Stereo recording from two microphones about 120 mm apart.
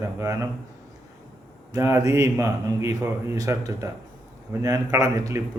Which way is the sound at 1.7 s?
25° right (ahead or behind).